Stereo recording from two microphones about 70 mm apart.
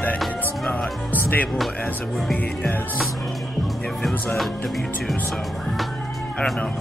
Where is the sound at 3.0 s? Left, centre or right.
Centre.